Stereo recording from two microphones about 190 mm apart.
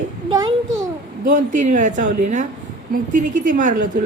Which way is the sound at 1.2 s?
40° right (ahead or behind).